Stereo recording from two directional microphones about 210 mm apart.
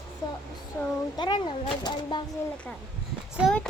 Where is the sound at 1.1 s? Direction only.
20° left (ahead or behind).